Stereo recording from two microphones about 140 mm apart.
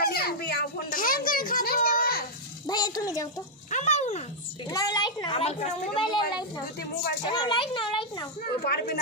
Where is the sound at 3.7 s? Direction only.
55° left (ahead or behind).